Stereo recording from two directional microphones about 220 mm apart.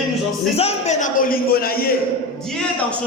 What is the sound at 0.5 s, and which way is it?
Speech, 30° left (ahead or behind).